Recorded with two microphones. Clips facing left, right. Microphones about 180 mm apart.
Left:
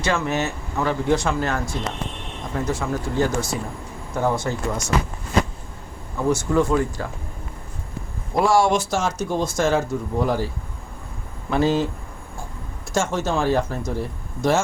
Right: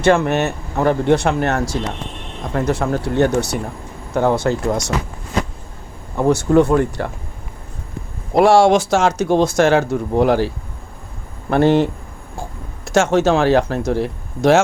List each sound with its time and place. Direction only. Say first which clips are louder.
0.0 s speech: right 8 dB; 60° right (ahead or behind); by 1.8 s 85° right
2.5 s speech: right 6 dB; 65° right (ahead or behind)
6.1 s speech: right 6 dB; 65° right (ahead or behind)
8.4 s speech: right 7 dB; 75° right (ahead or behind)
11.4 s speech: right 6 dB; 60° right (ahead or behind)
12.4 s speech: right 7 dB; 75° right (ahead or behind)